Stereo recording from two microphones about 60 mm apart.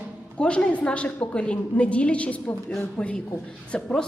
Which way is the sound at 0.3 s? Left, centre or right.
Centre.